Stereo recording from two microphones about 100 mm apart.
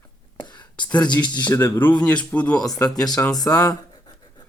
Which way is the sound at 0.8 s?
15° left (ahead or behind).